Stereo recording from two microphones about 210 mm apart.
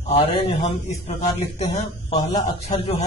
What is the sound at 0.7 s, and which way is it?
A man's voice, 30° left (ahead or behind).